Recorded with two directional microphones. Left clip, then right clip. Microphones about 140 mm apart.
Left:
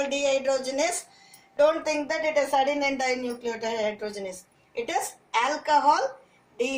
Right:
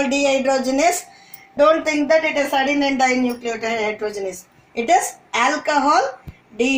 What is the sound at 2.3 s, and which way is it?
A woman's voice, 70° right (ahead or behind).